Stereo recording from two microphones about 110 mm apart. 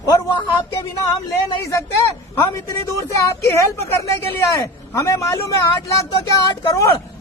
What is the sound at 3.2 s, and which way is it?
A man's voice, 30° left (ahead or behind).